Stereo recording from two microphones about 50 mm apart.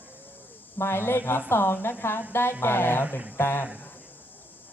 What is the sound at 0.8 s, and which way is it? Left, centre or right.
A woman's voice, left.